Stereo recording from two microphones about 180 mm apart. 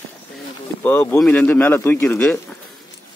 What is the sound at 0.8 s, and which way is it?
Speech, 10° left (ahead or behind).